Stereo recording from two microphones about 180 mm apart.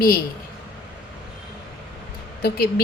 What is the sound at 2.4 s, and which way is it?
Speech, 60° left (ahead or behind).